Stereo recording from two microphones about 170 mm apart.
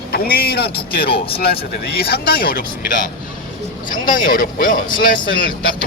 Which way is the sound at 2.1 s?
65° left (ahead or behind).